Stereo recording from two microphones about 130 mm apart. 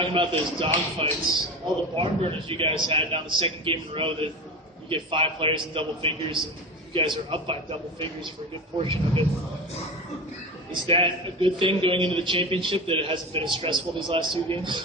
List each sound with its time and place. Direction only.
0.0 s a man's voice: 40° right (ahead or behind)
10.7 s a man's voice: 45° right (ahead or behind)